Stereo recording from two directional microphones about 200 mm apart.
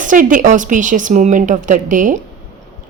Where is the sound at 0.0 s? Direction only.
40° right (ahead or behind).